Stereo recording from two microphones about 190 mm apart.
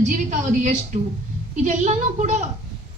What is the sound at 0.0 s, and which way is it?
A woman's voice, 40° right (ahead or behind).